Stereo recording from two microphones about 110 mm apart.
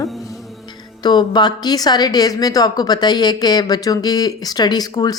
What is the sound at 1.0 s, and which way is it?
A woman's voice, 40° left (ahead or behind).